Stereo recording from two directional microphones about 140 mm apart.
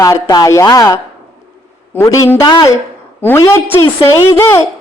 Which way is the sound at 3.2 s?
20° left (ahead or behind).